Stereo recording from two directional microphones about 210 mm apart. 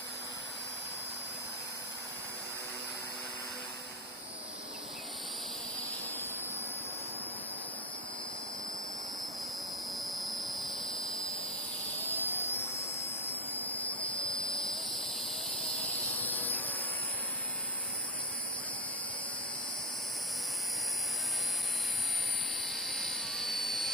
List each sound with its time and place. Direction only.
10.0 s jet engine: centre (ahead or behind)
12.1 s a sound: 10° left (ahead or behind)
13.2 s vehicle: 10° left (ahead or behind)
14.5 s jet engine: centre (ahead or behind)
16.2 s a sound: 10° left (ahead or behind)
22.6 s jet engine: centre (ahead or behind)